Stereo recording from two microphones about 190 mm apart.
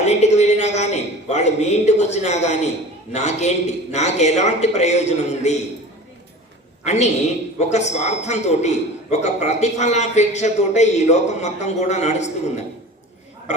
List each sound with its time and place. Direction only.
0.0 s a woman's voice: 35° left (ahead or behind)
6.8 s a woman's voice: 35° left (ahead or behind)
13.5 s a woman's voice: 35° left (ahead or behind)